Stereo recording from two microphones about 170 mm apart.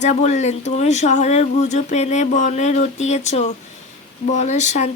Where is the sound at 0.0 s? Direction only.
40° left (ahead or behind).